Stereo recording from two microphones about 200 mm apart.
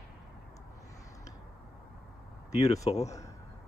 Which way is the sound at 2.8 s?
35° left (ahead or behind).